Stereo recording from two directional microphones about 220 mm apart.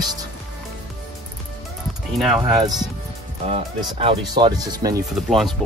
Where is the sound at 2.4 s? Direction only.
20° right (ahead or behind).